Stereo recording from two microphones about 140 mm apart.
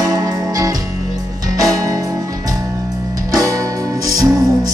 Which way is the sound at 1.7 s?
25° right (ahead or behind).